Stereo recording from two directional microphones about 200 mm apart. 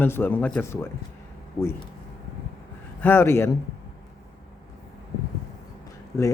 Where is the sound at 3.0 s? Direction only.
10° left (ahead or behind).